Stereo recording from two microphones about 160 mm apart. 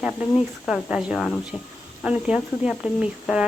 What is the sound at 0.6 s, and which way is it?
A woman's voice, 5° right (ahead or behind).